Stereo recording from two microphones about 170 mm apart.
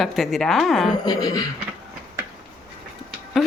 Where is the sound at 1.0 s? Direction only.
20° left (ahead or behind).